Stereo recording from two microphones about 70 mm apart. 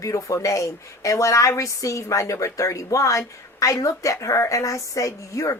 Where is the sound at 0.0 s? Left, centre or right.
Left.